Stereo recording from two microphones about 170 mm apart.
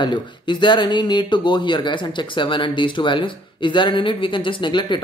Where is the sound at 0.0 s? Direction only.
25° left (ahead or behind).